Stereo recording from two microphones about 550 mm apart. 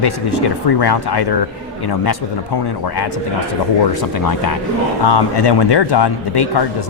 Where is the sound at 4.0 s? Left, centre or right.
Left.